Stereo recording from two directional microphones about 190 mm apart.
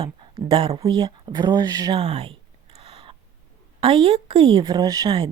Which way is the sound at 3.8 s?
30° right (ahead or behind).